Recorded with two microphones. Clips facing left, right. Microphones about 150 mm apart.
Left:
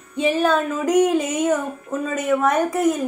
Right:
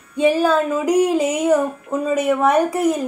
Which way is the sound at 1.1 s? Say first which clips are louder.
Right 3 dB; 10° right (ahead or behind).